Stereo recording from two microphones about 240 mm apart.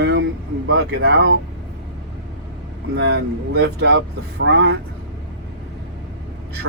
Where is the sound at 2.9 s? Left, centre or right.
Right.